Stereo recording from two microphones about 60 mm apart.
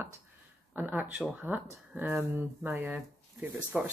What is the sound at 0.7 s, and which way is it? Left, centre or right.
Speech, right.